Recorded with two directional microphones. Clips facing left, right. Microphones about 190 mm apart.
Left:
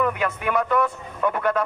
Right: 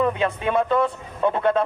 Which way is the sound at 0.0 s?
25° right (ahead or behind).